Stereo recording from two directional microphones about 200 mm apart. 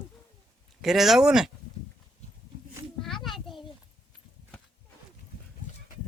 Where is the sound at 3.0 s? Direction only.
Centre (ahead or behind).